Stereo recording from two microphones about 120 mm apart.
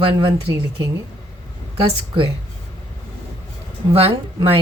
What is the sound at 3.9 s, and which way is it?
Speech, 50° right (ahead or behind).